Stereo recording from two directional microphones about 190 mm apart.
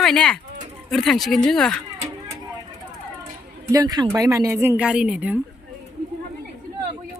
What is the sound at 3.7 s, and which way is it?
A woman's voice, 20° right (ahead or behind).